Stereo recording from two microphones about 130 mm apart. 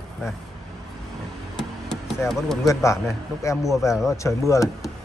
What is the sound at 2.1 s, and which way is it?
Speech, centre (ahead or behind).